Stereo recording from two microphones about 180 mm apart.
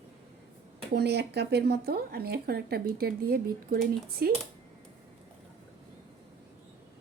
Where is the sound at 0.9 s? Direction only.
65° right (ahead or behind).